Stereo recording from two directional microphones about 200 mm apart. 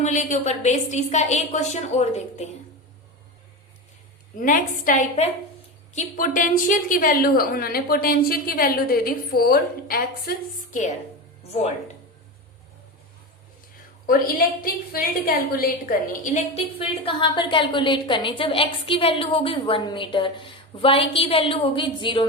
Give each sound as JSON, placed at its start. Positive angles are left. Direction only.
{"t": 0.0, "sound": "a woman's voice", "side_deg": 35}
{"t": 4.4, "sound": "a woman's voice", "side_deg": 40}
{"t": 14.1, "sound": "a woman's voice", "side_deg": 45}
{"t": 16.7, "sound": "a woman's voice", "side_deg": 25}